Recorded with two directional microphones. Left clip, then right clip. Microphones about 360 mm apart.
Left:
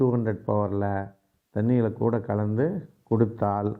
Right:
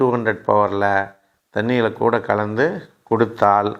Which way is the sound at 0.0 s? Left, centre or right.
Centre.